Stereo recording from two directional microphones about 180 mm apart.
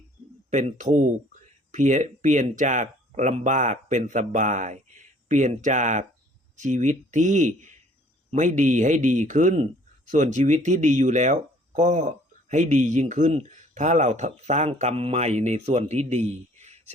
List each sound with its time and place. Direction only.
0.5 s a man's voice: 45° right (ahead or behind)